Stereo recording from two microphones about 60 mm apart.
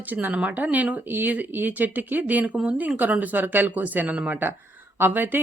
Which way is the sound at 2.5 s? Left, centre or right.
Centre.